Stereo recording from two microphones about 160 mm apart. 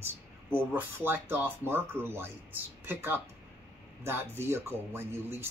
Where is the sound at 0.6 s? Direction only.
15° right (ahead or behind).